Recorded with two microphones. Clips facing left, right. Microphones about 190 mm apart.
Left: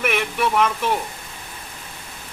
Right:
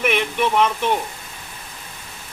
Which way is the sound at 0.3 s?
25° right (ahead or behind).